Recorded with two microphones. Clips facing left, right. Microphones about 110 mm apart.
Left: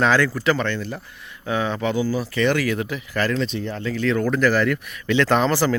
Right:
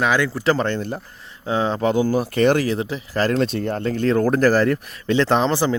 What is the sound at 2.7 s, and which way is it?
Speech, 30° right (ahead or behind).